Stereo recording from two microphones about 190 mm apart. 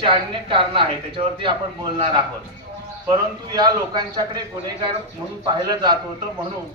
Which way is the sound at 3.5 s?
20° right (ahead or behind).